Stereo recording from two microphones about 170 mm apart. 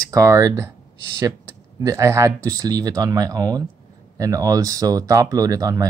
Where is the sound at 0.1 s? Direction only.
20° right (ahead or behind).